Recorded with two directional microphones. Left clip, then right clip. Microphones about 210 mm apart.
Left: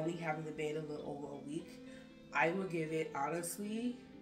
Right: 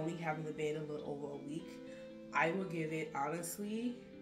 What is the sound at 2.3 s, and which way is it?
Speech, centre (ahead or behind).